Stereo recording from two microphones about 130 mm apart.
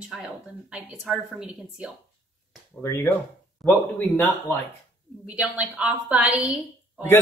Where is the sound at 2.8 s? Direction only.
20° left (ahead or behind).